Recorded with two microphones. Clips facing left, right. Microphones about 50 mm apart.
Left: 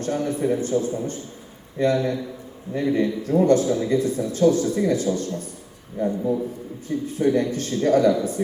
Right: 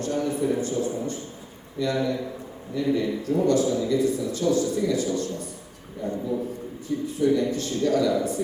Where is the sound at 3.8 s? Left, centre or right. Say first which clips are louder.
Left 1 dB; left.